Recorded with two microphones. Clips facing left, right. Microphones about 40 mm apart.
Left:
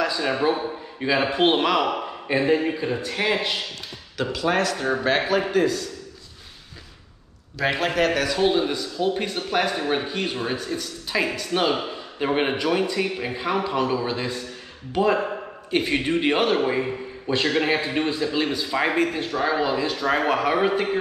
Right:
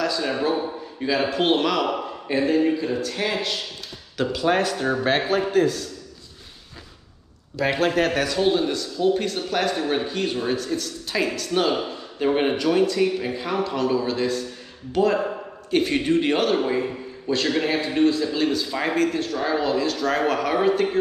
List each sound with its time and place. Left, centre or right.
0.0 s a man's voice: centre
4.2 s speech: centre
4.7 s a man's voice: centre
8.2 s a man's voice: centre